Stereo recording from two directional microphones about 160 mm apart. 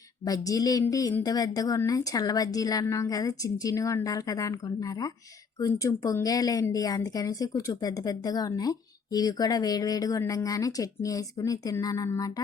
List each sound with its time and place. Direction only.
0.3 s speech: 20° left (ahead or behind)